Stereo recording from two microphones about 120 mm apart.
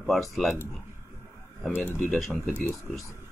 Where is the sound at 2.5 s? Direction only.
15° left (ahead or behind).